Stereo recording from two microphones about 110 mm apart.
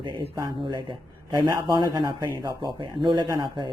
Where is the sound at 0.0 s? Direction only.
50° right (ahead or behind).